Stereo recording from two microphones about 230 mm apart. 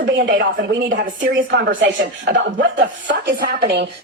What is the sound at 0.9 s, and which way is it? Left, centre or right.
Speech, right.